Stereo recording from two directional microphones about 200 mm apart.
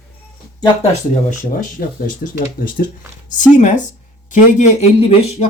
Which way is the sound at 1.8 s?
50° left (ahead or behind).